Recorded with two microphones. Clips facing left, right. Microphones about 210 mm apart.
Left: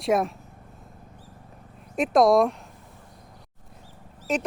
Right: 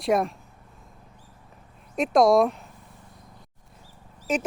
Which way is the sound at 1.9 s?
Centre (ahead or behind).